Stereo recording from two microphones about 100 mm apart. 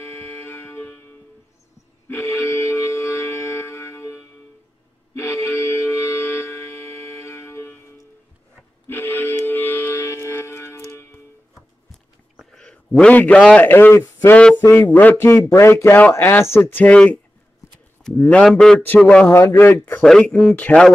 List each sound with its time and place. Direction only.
0.0 s a sound: 25° left (ahead or behind)
2.0 s music: 30° left (ahead or behind)
8.8 s music: 20° left (ahead or behind)
12.4 s a sound: 5° left (ahead or behind)
13.6 s a man's voice: 20° left (ahead or behind)
18.2 s speech: 5° left (ahead or behind)
19.0 s a man's voice: 20° left (ahead or behind)
20.0 s speech: 5° left (ahead or behind)
20.5 s speech: 15° left (ahead or behind)